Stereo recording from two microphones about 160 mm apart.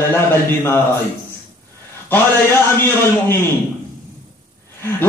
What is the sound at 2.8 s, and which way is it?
Speech, 15° left (ahead or behind).